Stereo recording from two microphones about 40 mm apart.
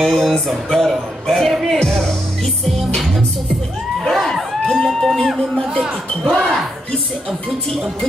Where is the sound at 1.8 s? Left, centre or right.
Centre.